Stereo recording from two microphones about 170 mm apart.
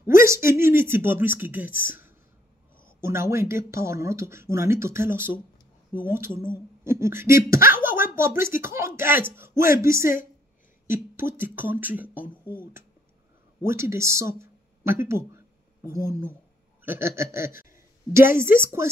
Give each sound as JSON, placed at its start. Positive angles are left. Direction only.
{"t": 0.3, "sound": "speech", "side_deg": -15}
{"t": 11.1, "sound": "speech", "side_deg": -15}